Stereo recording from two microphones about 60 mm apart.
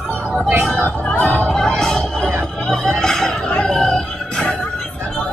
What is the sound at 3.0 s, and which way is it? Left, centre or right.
Music, centre.